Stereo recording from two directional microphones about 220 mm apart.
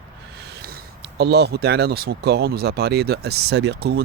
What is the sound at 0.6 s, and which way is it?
Speech, 45° right (ahead or behind).